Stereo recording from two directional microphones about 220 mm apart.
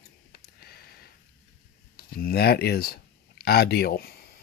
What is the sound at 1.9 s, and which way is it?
Speech, 45° left (ahead or behind).